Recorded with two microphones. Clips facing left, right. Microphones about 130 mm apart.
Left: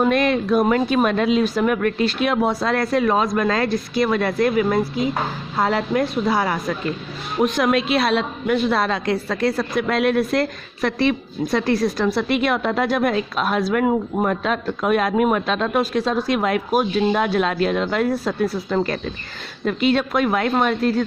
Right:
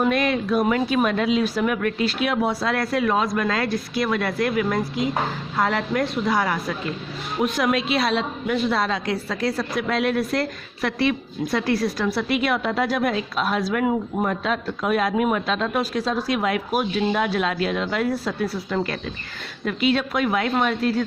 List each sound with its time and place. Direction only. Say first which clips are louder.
0.0 s a woman's voice: left 3 dB; 45° left (ahead or behind)
7.5 s speech: left 2 dB; 50° left (ahead or behind)